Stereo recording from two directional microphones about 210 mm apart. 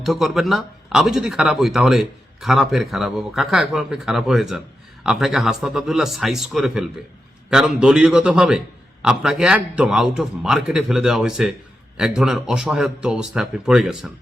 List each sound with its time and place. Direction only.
0.0 s speech: centre (ahead or behind)